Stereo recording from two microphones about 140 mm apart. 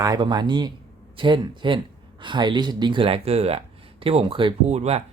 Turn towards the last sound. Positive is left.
turn(degrees=-50)  # may be behind; listen again after turning